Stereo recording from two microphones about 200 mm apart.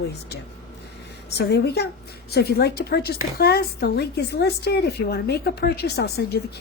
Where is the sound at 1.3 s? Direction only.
55° left (ahead or behind).